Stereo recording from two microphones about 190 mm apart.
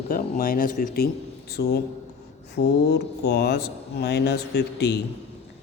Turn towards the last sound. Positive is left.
turn(degrees=60)  # may be behind; listen again after turning